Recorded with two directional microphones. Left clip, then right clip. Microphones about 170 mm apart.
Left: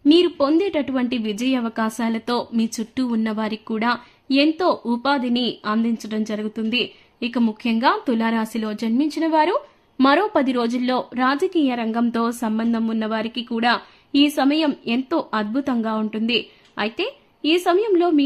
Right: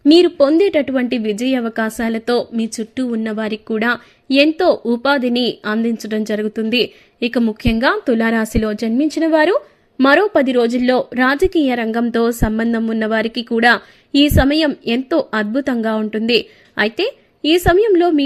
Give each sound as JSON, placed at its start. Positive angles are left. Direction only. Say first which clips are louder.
{"t": 0.0, "sound": "a woman's voice", "louder": "right 6 dB", "side_deg": -25}